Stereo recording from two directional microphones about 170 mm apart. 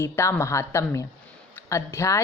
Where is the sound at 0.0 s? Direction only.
15° left (ahead or behind).